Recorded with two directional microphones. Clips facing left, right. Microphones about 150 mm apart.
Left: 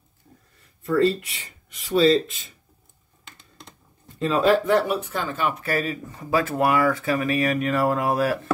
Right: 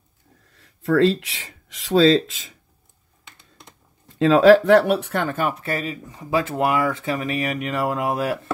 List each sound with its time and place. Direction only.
0.5 s speech: 90° right
4.2 s speech: 85° right; by 5.5 s 55° right (ahead or behind)
5.5 s speech: 25° right (ahead or behind)